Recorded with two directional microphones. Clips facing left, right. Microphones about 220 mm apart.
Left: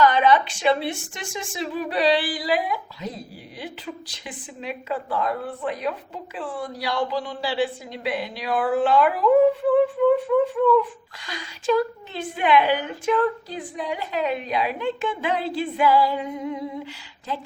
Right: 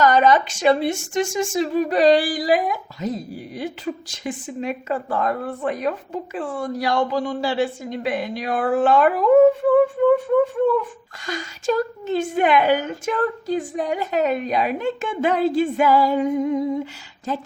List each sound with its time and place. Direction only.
0.0 s speech: 45° right (ahead or behind)
11.3 s speech: 45° right (ahead or behind)